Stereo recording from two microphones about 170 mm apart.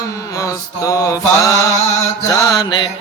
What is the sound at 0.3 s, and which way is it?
Mantra, 20° left (ahead or behind).